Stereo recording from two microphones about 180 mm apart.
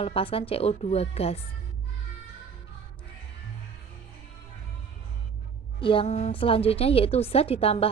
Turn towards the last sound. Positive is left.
turn(degrees=30)  # may be behind; listen again after turning